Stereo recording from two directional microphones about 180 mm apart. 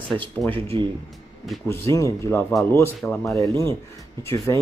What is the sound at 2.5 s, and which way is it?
Speech, centre (ahead or behind).